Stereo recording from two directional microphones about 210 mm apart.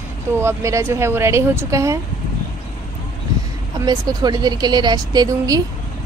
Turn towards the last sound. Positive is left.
turn(degrees=-15)  # may be behind; listen again after turning